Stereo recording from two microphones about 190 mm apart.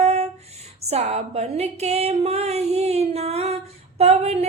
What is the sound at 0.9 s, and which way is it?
Music, 35° right (ahead or behind).